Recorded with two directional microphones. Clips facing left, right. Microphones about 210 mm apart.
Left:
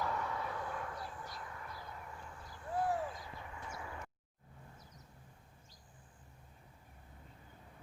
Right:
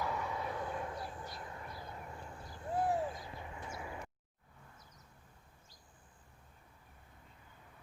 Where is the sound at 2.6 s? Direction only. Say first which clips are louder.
Right 2 dB; 20° right (ahead or behind).